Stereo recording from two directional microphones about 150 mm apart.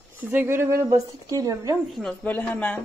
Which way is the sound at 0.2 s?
15° right (ahead or behind).